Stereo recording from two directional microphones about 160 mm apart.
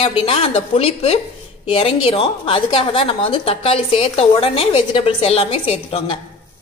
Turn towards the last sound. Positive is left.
turn(degrees=35)  # may be behind; listen again after turning